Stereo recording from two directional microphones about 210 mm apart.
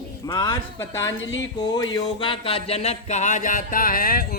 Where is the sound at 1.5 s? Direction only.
20° left (ahead or behind).